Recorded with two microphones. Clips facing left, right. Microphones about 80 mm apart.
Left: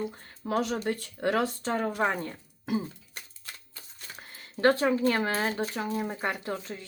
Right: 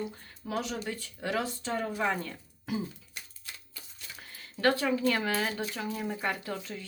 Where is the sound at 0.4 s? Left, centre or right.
Left.